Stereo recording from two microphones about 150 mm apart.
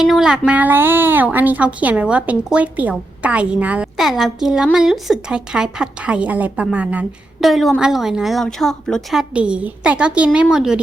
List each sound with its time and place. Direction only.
0.0 s a woman's voice: 5° right (ahead or behind)